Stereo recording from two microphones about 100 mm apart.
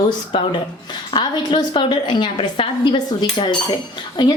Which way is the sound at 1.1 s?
50° left (ahead or behind).